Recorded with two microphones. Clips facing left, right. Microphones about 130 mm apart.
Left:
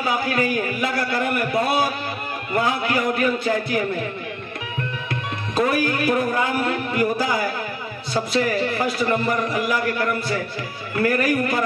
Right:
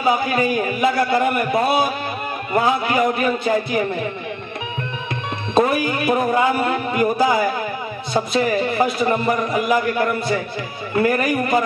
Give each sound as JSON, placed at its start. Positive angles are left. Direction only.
{"t": 0.0, "sound": "a man's voice", "side_deg": -20}
{"t": 5.5, "sound": "a man's voice", "side_deg": -20}